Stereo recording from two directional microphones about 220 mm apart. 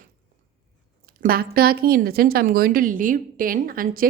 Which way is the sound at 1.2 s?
45° right (ahead or behind).